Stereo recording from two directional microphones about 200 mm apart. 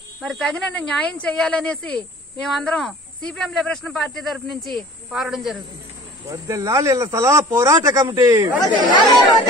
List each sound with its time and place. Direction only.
0.2 s speech: centre (ahead or behind)
6.3 s speech: 15° right (ahead or behind)